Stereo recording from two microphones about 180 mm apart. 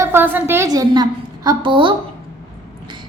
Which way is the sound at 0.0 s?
10° right (ahead or behind).